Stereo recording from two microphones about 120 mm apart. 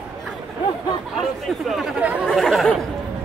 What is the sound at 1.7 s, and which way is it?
Chatter, 5° right (ahead or behind).